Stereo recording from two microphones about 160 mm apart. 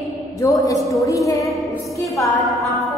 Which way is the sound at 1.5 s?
Centre (ahead or behind).